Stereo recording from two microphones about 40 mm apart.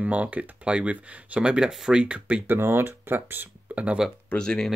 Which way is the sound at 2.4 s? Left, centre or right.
Right.